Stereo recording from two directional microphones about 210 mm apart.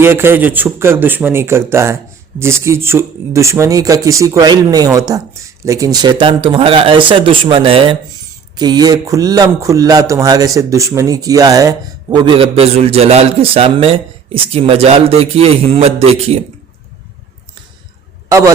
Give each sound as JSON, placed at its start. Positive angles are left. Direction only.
{"t": 0.0, "sound": "a man's voice", "side_deg": -10}
{"t": 18.3, "sound": "a man's voice", "side_deg": -15}